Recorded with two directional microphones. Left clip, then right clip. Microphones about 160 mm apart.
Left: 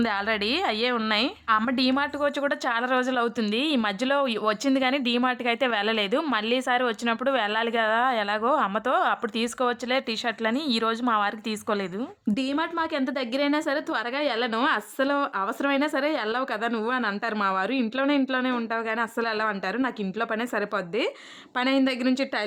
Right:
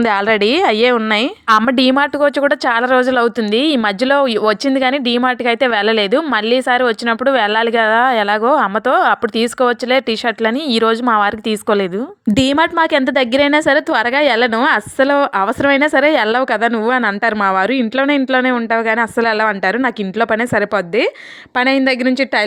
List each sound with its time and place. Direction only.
0.0 s speech: 40° right (ahead or behind)
12.3 s a woman's voice: 55° right (ahead or behind); by 22.4 s 40° right (ahead or behind)